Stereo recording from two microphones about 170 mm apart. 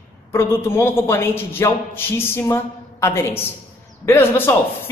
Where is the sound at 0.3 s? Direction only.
15° left (ahead or behind).